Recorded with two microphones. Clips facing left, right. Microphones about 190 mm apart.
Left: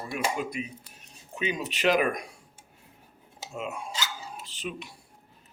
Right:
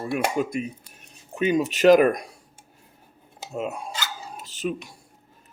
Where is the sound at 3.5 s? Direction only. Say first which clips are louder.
Right 5 dB; 40° right (ahead or behind).